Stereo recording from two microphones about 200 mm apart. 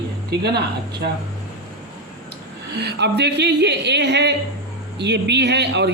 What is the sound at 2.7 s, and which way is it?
Speech, 55° right (ahead or behind).